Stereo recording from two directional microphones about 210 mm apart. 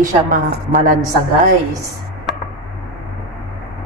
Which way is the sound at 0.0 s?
40° right (ahead or behind).